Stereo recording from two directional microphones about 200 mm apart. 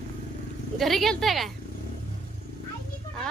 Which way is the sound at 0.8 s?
Centre (ahead or behind).